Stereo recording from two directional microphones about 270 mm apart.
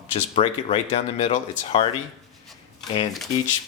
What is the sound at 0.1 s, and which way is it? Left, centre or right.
Speech, left.